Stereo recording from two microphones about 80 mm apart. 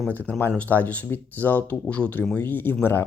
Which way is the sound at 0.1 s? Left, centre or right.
Left.